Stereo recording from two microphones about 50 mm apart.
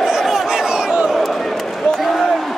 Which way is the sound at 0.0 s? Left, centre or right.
Centre.